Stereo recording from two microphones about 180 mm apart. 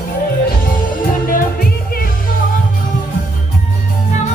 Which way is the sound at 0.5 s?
50° left (ahead or behind).